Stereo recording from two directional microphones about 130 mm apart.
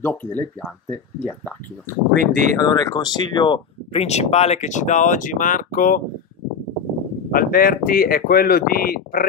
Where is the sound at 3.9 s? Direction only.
55° left (ahead or behind); by 6.0 s 90° left.